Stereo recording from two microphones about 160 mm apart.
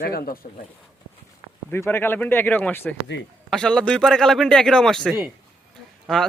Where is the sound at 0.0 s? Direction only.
70° left (ahead or behind).